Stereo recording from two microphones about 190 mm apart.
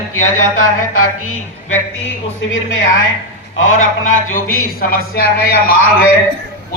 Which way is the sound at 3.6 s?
90° left.